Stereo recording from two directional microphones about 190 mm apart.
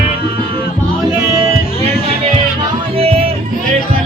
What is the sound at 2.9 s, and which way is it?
Music, 30° right (ahead or behind).